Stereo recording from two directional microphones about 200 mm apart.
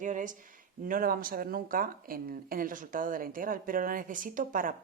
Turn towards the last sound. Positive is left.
turn(degrees=-45)  # may be behind; listen again after turning